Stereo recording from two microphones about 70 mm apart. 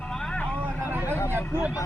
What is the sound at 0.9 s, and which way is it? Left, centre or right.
Vehicle, right.